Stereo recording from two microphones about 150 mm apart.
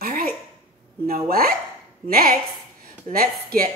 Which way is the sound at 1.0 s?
80° right.